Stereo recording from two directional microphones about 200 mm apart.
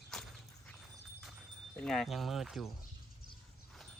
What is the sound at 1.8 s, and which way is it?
Speech, centre (ahead or behind).